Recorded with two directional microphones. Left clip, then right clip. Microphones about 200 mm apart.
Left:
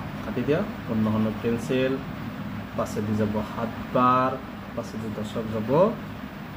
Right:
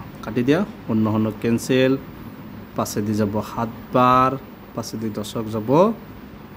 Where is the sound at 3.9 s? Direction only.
55° right (ahead or behind).